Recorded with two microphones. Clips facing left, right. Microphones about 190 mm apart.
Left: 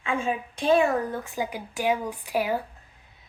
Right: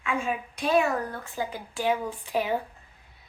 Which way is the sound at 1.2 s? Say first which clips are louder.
Left 2 dB; 15° left (ahead or behind).